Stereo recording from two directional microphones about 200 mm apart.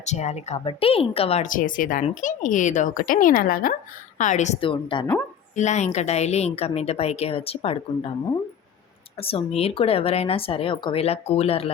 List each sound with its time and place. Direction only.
0.0 s a woman's voice: 35° left (ahead or behind)
5.5 s a woman's voice: 35° left (ahead or behind)
9.2 s speech: 30° left (ahead or behind)